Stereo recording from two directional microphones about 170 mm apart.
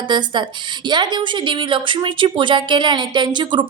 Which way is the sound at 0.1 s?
25° right (ahead or behind).